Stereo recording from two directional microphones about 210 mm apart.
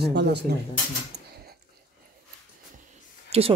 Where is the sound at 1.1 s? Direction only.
55° right (ahead or behind).